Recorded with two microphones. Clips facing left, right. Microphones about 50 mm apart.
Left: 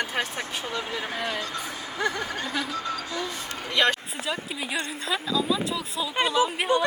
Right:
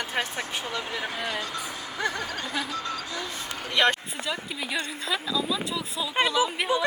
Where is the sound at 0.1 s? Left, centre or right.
Centre.